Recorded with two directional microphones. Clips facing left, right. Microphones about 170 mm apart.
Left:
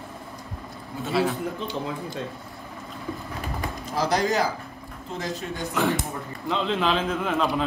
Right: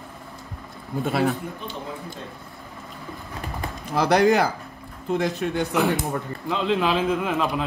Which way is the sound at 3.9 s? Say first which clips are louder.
Right 6 dB; 60° right (ahead or behind).